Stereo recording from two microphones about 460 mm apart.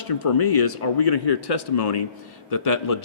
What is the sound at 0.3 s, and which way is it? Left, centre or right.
Speech, left.